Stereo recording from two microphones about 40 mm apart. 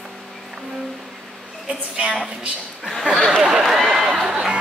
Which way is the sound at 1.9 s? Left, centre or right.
Centre.